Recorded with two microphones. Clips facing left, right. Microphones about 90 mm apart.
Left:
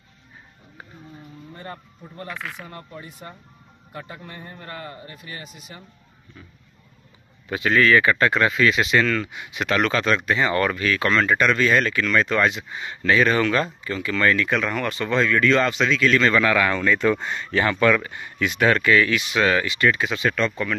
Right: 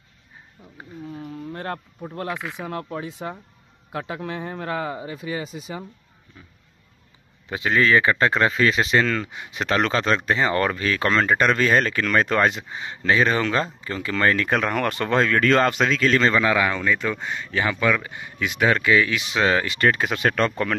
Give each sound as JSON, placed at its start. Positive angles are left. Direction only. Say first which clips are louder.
{"t": 1.5, "sound": "a sound", "louder": "right 6 dB", "side_deg": -70}
{"t": 2.2, "sound": "speech", "louder": "right 3 dB", "side_deg": -20}
{"t": 2.6, "sound": "speech", "louder": "right 8 dB", "side_deg": -90}
{"t": 7.4, "sound": "speech", "louder": "left 2 dB", "side_deg": -20}
{"t": 12.6, "sound": "speech", "louder": "even", "side_deg": -25}
{"t": 16.3, "sound": "speech", "louder": "left 1 dB", "side_deg": -15}
{"t": 19.6, "sound": "speech", "louder": "even", "side_deg": -45}